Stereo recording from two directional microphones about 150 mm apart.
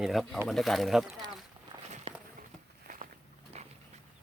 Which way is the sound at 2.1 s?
40° right (ahead or behind).